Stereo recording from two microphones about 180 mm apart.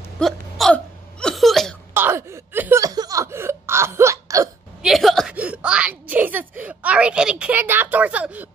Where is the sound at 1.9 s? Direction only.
15° right (ahead or behind).